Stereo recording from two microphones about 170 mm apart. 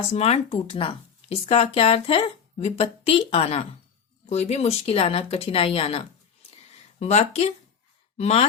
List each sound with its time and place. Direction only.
0.1 s speech: 40° left (ahead or behind)
7.0 s speech: 40° left (ahead or behind)